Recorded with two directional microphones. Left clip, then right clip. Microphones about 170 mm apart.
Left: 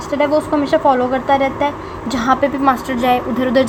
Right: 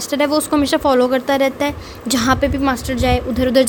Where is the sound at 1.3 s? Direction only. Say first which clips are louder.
Left 2 dB; 90° right.